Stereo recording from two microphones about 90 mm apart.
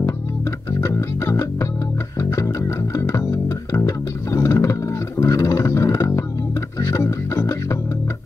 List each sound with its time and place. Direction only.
0.7 s music: 35° left (ahead or behind)